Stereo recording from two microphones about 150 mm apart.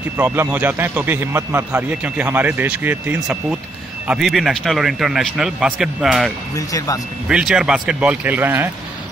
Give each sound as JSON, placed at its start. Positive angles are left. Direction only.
{"t": 0.2, "sound": "a man's voice", "side_deg": -10}
{"t": 6.5, "sound": "speech", "side_deg": 25}
{"t": 7.2, "sound": "a man's voice", "side_deg": -5}